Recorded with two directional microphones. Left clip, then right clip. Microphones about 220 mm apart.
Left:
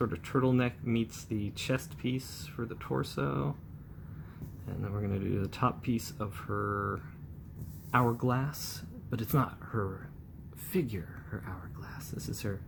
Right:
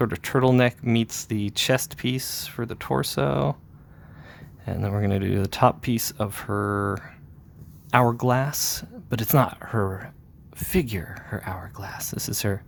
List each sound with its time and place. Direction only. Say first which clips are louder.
0.0 s speech: right 9 dB; 45° right (ahead or behind)
4.6 s speech: right 11 dB; 45° right (ahead or behind)